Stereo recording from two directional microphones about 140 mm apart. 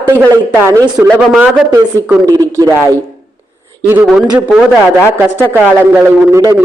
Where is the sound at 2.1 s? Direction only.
20° right (ahead or behind).